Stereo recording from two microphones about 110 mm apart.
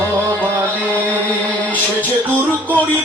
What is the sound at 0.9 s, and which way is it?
Chant, 15° left (ahead or behind).